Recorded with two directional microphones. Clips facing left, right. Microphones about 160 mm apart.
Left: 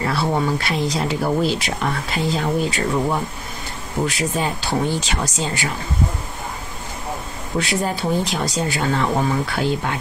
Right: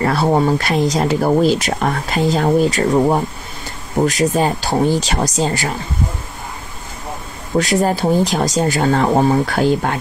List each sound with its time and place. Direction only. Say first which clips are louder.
0.0 s speech: right 6 dB; 45° right (ahead or behind)
7.5 s speech: right 7 dB; 40° right (ahead or behind)